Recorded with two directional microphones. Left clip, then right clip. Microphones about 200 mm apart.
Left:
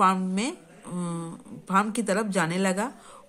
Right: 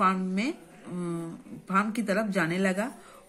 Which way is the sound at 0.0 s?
40° left (ahead or behind).